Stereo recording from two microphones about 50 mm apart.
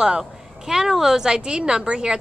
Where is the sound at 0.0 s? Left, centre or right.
Centre.